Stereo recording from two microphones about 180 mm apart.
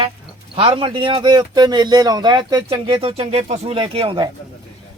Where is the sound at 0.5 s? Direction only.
30° right (ahead or behind).